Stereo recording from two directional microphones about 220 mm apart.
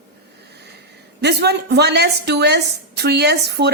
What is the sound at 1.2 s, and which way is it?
Speech, 50° right (ahead or behind).